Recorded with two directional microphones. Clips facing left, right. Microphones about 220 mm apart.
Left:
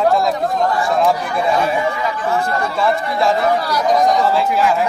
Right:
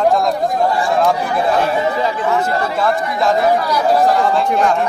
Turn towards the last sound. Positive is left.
turn(degrees=5)  # may be behind; listen again after turning